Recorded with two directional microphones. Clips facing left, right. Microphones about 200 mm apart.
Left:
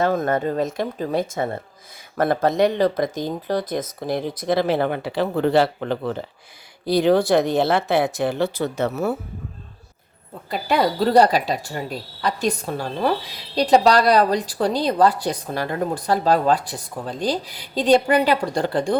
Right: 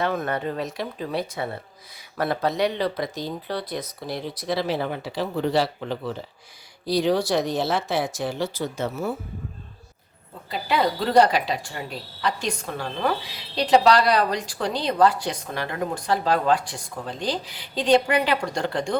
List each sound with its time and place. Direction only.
0.0 s speech: 45° left (ahead or behind); by 9.1 s 70° left (ahead or behind)
10.5 s a woman's voice: 40° left (ahead or behind)